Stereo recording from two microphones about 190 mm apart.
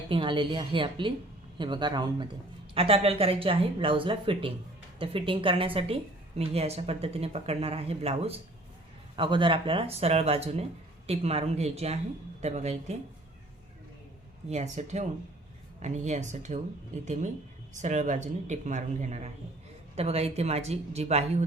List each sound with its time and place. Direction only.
0.1 s a woman's voice: 25° right (ahead or behind)
14.5 s a woman's voice: 35° right (ahead or behind)